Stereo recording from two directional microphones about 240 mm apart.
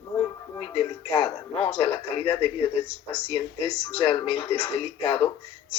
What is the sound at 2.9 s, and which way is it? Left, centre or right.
Speech, left.